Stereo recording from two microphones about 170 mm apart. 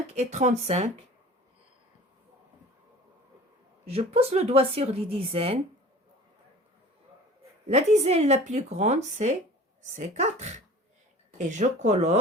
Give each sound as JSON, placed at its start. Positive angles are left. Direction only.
{"t": 0.1, "sound": "a woman's voice", "side_deg": -40}
{"t": 3.8, "sound": "a woman's voice", "side_deg": -35}
{"t": 7.7, "sound": "a woman's voice", "side_deg": -40}